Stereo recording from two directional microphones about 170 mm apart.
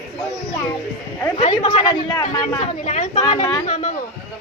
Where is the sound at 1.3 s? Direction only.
40° left (ahead or behind).